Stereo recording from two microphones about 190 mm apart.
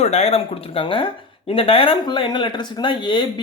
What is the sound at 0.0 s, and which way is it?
Speech, 35° left (ahead or behind).